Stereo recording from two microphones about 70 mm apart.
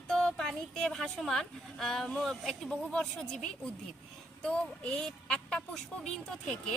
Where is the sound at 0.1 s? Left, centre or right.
Centre.